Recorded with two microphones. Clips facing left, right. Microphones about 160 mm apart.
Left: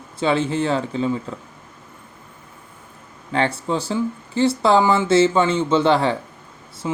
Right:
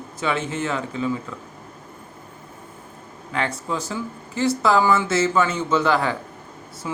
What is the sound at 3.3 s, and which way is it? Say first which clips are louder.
Speech: left 5 dB; 30° left (ahead or behind).